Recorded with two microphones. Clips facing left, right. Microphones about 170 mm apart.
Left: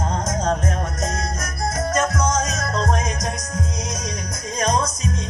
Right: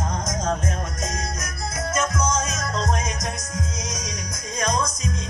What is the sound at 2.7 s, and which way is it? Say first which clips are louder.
Music: left 3 dB; 55° left (ahead or behind).